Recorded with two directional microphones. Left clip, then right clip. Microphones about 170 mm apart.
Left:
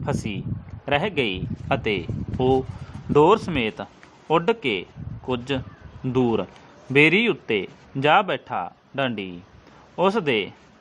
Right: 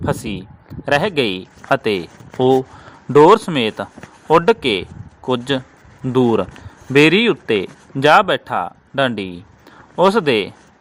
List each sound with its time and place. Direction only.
0.0 s a man's voice: 25° right (ahead or behind)